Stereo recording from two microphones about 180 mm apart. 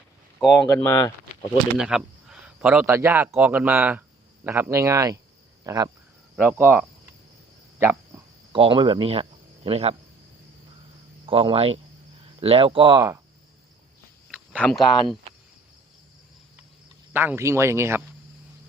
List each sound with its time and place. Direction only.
0.7 s speech: 15° left (ahead or behind)
1.8 s speech: 5° right (ahead or behind); by 5.9 s 20° right (ahead or behind)
6.3 s speech: centre (ahead or behind)
6.6 s speech: 10° right (ahead or behind)
7.8 s cricket: 10° right (ahead or behind)
8.5 s speech: 25° right (ahead or behind)
11.3 s speech: 30° right (ahead or behind)
14.3 s a sound: 5° left (ahead or behind)
17.1 s speech: 10° right (ahead or behind)